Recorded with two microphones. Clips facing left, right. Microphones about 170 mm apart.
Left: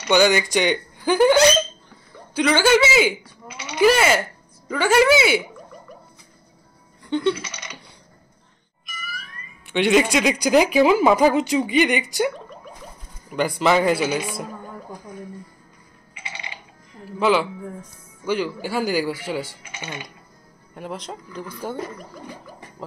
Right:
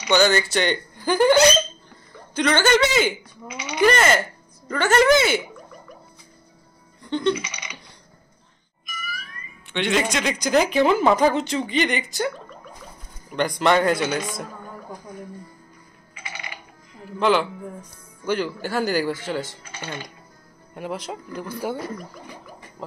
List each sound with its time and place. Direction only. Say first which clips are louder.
0.0 s speech: left 1 dB; 10° left (ahead or behind)
7.1 s a sound: left 1 dB; 10° left (ahead or behind)
9.7 s speech: left 5 dB; 10° left (ahead or behind)
13.3 s a man's voice: left 1 dB; 5° left (ahead or behind)
16.2 s music: even; 25° left (ahead or behind)
17.2 s a man's voice: left 1 dB; 5° left (ahead or behind)
22.8 s a sound: even; centre (ahead or behind)